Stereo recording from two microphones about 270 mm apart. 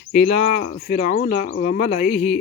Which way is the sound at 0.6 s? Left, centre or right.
Left.